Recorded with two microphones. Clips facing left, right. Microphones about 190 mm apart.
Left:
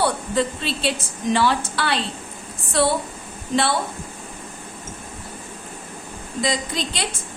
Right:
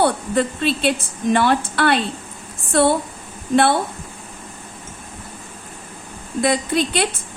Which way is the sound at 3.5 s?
55° right (ahead or behind).